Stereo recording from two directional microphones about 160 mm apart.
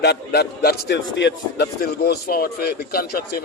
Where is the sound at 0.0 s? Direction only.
90° left.